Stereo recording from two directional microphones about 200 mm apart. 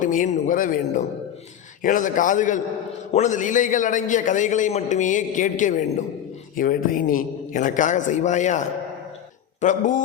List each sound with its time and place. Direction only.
0.0 s a man's voice: 40° left (ahead or behind)